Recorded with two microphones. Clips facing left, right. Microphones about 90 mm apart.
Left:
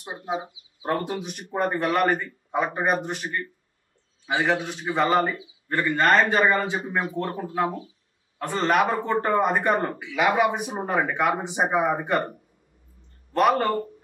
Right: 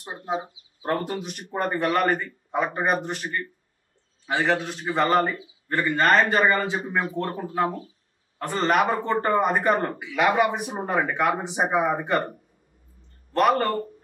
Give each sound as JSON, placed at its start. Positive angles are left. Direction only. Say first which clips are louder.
{"t": 0.3, "sound": "speech", "louder": "right 1 dB", "side_deg": 5}
{"t": 13.3, "sound": "speech", "louder": "even", "side_deg": 0}